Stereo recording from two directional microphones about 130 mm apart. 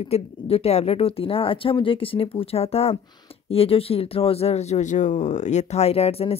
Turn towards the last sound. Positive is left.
turn(degrees=50)  # may be behind; listen again after turning